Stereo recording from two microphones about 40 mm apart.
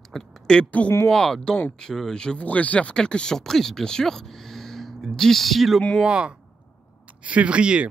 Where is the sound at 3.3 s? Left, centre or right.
Centre.